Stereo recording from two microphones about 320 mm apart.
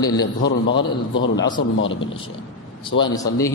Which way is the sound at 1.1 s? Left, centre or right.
Left.